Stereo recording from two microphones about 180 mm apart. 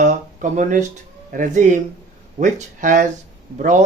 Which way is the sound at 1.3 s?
45° right (ahead or behind).